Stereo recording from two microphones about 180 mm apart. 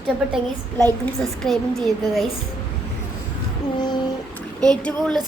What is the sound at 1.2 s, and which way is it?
Speech, centre (ahead or behind).